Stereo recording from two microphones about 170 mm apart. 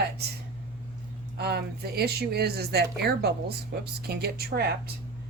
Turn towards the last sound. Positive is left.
turn(degrees=-65)  # may be behind; listen again after turning